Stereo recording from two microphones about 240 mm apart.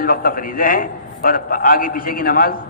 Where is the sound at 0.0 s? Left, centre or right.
Left.